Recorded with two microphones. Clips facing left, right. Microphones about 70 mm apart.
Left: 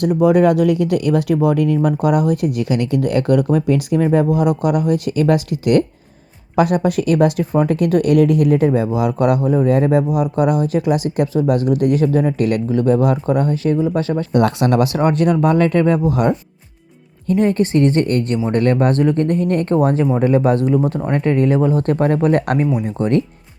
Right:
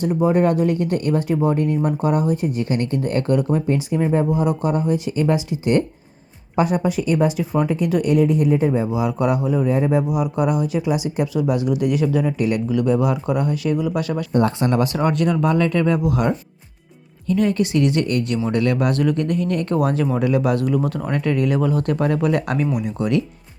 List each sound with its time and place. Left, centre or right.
0.0 s speech: left
9.7 s speech: left
10.1 s speech: left
12.6 s speech: left
14.3 s speech: left